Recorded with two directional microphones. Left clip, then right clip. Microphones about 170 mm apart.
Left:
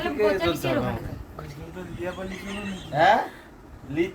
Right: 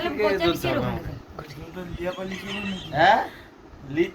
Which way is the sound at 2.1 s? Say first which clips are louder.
Right 2 dB; 15° right (ahead or behind).